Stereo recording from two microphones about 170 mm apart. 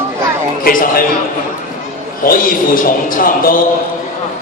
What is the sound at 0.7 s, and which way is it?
Speech, 60° left (ahead or behind).